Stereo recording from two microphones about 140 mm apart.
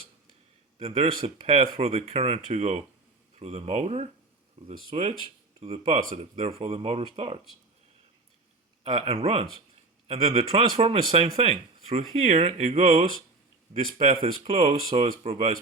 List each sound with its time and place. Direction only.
0.8 s speech: 45° right (ahead or behind)
8.8 s speech: 45° right (ahead or behind)
13.7 s speech: 70° right (ahead or behind)
14.1 s speech: 45° right (ahead or behind)